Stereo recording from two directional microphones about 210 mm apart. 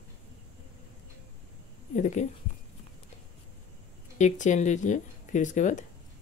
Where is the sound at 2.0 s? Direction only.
35° left (ahead or behind).